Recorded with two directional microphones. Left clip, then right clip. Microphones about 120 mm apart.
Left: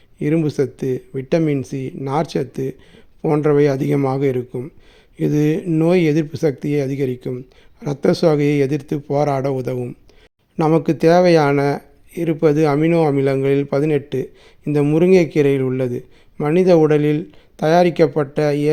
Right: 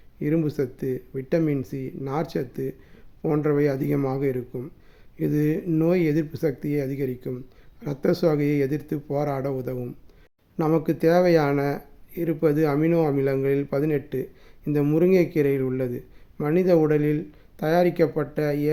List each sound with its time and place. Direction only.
0.2 s speech: 40° left (ahead or behind)